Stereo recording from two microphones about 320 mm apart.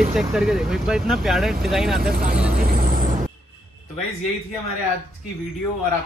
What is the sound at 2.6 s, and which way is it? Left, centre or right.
Vehicle, right.